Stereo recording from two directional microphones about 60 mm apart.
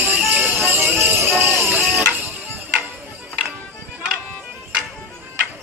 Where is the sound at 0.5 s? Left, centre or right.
Right.